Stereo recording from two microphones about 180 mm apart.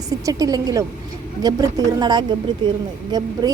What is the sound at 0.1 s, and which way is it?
A woman's voice, 20° right (ahead or behind).